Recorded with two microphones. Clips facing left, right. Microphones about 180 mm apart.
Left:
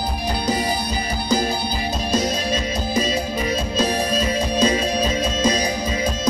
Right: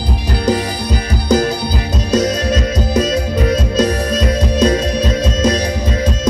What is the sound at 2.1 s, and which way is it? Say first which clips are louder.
Music: right 8 dB; 75° right (ahead or behind).